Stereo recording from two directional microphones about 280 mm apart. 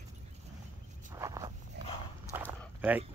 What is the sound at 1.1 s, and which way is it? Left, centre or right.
Walk, centre.